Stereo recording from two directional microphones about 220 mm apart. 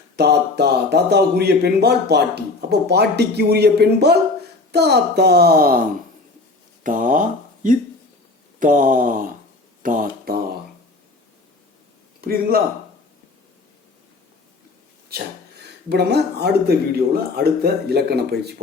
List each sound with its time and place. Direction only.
0.2 s speech: 50° right (ahead or behind)
6.8 s speech: 35° right (ahead or behind)
8.5 s a sound: 35° right (ahead or behind)
9.8 s speech: 40° right (ahead or behind)
12.2 s speech: 40° right (ahead or behind)
15.9 s speech: 50° right (ahead or behind)